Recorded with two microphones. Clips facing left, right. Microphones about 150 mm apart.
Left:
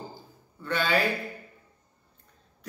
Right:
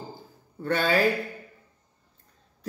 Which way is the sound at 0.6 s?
45° right (ahead or behind).